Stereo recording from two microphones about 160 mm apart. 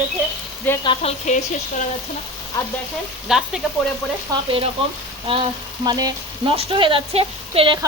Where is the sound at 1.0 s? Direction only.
40° left (ahead or behind).